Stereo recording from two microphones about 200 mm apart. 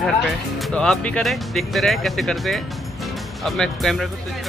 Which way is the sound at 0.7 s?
5° left (ahead or behind).